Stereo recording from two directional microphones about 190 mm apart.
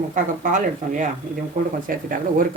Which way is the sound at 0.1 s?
40° right (ahead or behind).